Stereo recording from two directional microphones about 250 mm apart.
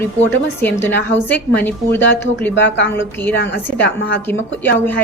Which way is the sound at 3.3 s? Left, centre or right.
Left.